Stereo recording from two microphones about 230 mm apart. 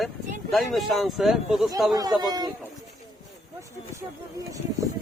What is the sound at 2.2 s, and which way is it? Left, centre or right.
Speech, centre.